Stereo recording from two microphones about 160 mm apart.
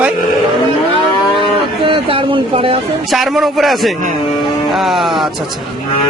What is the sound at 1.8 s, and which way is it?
Speech, 35° right (ahead or behind).